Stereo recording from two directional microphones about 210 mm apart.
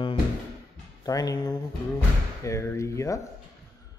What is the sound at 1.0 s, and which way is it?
A man's voice, 15° left (ahead or behind).